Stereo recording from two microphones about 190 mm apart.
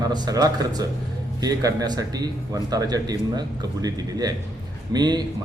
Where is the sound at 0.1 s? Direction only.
20° right (ahead or behind).